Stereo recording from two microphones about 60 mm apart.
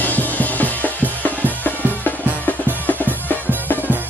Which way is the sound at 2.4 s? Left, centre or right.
Left.